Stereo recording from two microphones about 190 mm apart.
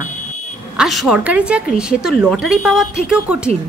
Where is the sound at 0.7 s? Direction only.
Centre (ahead or behind).